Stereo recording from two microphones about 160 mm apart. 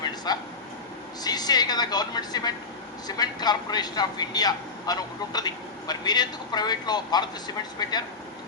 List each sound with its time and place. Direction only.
0.3 s a man's voice: 25° left (ahead or behind)